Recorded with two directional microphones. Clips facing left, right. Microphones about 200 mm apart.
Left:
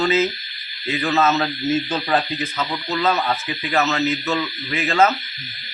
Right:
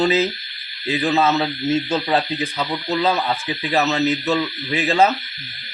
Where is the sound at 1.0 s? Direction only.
15° right (ahead or behind).